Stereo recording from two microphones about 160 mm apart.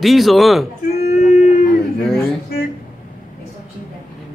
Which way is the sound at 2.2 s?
70° left (ahead or behind).